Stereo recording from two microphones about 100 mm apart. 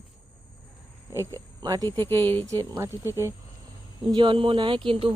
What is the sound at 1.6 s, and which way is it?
Speech, 40° right (ahead or behind).